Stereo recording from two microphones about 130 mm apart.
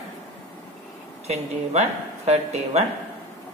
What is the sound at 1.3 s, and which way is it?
Speech, 55° right (ahead or behind).